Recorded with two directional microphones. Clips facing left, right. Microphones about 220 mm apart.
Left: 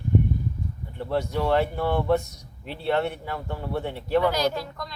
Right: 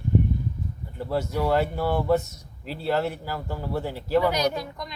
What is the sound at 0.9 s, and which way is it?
A man's voice, centre (ahead or behind).